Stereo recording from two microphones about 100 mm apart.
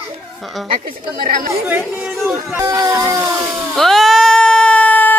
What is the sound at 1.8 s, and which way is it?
Speech, centre (ahead or behind).